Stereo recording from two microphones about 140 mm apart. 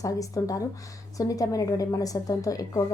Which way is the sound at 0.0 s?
25° left (ahead or behind).